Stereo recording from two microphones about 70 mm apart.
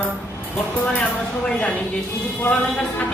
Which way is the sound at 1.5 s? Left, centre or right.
Centre.